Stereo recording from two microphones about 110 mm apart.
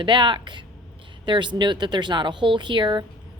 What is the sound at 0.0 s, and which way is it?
A woman's voice, 45° right (ahead or behind).